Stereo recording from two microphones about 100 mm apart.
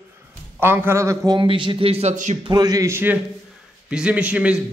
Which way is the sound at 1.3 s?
55° right (ahead or behind).